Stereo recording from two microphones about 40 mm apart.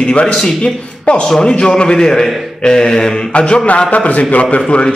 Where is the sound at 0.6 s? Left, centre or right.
Left.